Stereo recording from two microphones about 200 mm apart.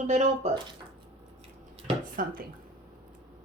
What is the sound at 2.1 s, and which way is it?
Speech, 45° right (ahead or behind).